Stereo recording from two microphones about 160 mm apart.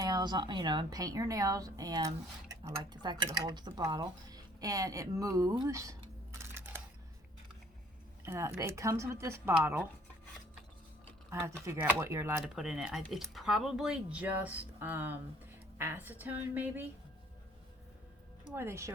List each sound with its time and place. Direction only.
0.0 s a woman's voice: 25° right (ahead or behind)
8.2 s speech: 15° right (ahead or behind)
11.3 s speech: 15° right (ahead or behind)
12.5 s speech: 5° right (ahead or behind)
18.5 s speech: 15° right (ahead or behind)